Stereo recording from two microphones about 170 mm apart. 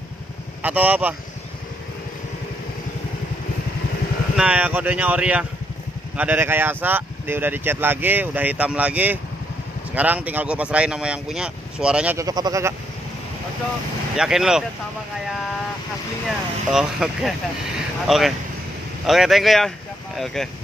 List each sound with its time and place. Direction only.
0.6 s speech: 10° right (ahead or behind)
4.4 s speech: 5° right (ahead or behind)
12.2 s a man's voice: 20° right (ahead or behind)
14.1 s speech: 5° right (ahead or behind)
16.3 s speech: centre (ahead or behind)